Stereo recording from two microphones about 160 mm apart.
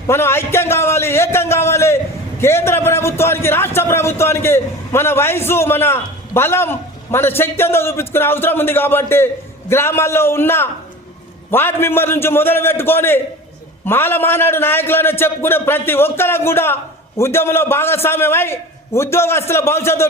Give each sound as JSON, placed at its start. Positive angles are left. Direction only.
{"t": 0.1, "sound": "a man's voice", "side_deg": 15}